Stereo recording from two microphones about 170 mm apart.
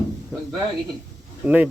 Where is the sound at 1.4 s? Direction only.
10° right (ahead or behind).